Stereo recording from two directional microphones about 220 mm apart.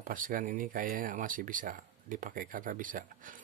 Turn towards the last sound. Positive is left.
turn(degrees=-40)  # may be behind; listen again after turning